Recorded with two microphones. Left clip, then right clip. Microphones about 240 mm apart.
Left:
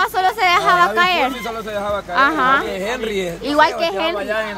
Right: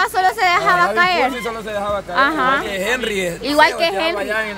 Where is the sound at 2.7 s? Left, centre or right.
Right.